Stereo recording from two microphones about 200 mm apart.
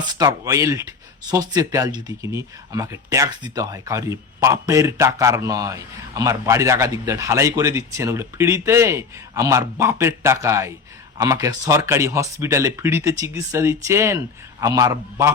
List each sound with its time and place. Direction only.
0.0 s speech: 20° right (ahead or behind)